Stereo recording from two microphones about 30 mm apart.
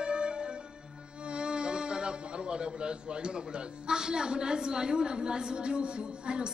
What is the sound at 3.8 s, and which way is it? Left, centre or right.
A woman's voice, right.